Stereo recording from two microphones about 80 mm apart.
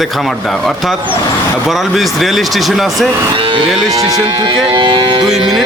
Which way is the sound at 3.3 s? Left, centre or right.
Right.